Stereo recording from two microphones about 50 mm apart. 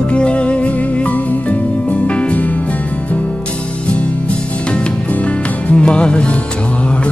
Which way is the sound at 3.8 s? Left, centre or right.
Left.